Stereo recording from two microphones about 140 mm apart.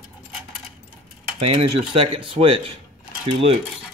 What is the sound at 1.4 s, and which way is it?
Speech, 45° right (ahead or behind).